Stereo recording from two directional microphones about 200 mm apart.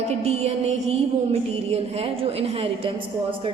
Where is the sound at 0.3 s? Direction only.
30° right (ahead or behind).